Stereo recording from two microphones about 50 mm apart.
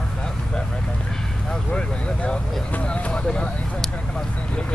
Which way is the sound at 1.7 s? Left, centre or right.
Centre.